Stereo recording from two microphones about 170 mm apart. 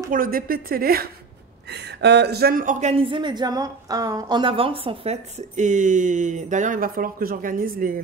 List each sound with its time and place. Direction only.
0.1 s a woman's voice: 55° right (ahead or behind)
1.7 s speech: 75° right (ahead or behind); by 8.0 s 55° right (ahead or behind)